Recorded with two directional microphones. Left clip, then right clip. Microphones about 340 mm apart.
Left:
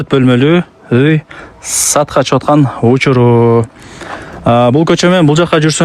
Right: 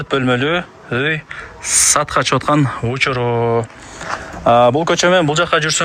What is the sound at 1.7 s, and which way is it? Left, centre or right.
Speech, centre.